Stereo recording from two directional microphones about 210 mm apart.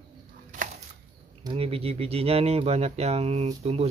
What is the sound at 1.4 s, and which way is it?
Speech, 25° right (ahead or behind).